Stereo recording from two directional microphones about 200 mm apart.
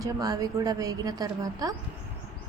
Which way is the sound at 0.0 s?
20° right (ahead or behind).